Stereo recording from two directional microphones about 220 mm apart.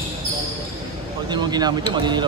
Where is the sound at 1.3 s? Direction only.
20° right (ahead or behind).